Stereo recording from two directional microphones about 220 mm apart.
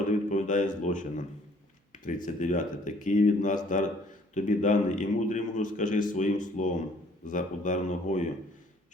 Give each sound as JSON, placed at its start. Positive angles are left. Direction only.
{"t": 0.3, "sound": "a man's voice", "side_deg": 35}
{"t": 2.2, "sound": "a man's voice", "side_deg": 35}